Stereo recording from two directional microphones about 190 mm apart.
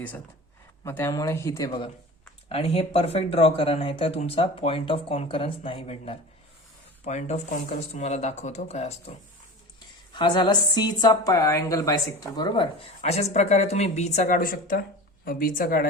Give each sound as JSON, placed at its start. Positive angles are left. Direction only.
{"t": 0.9, "sound": "speech", "side_deg": 10}
{"t": 10.2, "sound": "a woman's voice", "side_deg": 25}
{"t": 13.0, "sound": "a woman's voice", "side_deg": 35}